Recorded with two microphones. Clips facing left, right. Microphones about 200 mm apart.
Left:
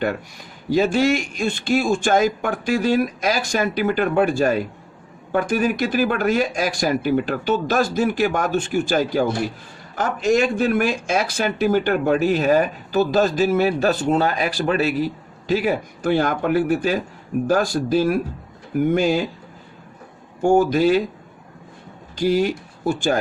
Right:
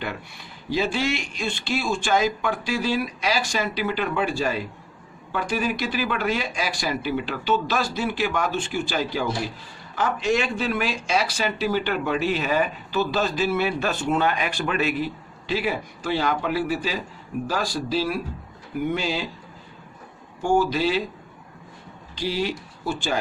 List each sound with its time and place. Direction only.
0.0 s speech: 45° left (ahead or behind)
20.4 s speech: 50° left (ahead or behind)
22.1 s speech: 45° left (ahead or behind)